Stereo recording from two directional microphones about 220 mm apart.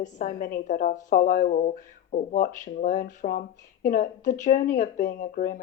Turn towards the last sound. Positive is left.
turn(degrees=35)  # may be behind; listen again after turning